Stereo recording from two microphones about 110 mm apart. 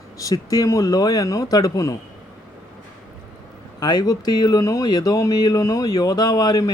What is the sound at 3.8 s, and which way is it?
Speech, 40° left (ahead or behind).